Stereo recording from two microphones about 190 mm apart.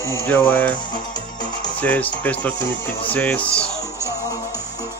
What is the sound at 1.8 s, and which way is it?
Speech, 10° left (ahead or behind).